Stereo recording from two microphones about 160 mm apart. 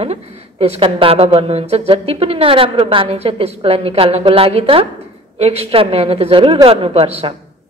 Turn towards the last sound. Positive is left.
turn(degrees=-40)  # may be behind; listen again after turning